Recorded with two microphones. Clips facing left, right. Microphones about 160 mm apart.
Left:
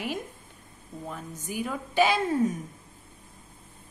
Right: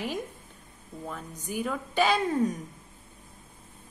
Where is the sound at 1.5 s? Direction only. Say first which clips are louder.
Left 2 dB; 5° left (ahead or behind).